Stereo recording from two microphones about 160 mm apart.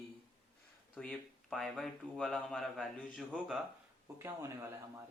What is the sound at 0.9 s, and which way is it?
Speech, 5° left (ahead or behind).